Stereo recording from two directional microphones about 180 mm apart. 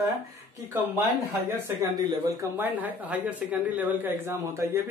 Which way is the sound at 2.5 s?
10° right (ahead or behind).